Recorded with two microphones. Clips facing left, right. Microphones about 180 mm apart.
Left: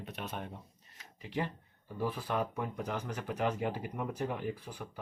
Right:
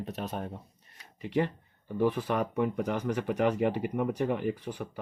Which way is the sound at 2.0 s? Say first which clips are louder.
Right 6 dB; 70° right (ahead or behind).